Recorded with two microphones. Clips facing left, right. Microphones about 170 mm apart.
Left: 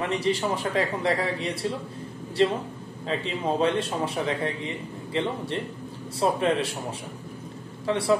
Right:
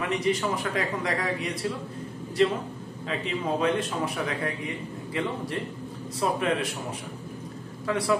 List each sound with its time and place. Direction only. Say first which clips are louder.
0.0 s a man's voice: left 1 dB; 30° left (ahead or behind)